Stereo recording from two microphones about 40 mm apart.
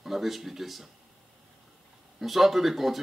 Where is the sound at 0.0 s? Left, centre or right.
Centre.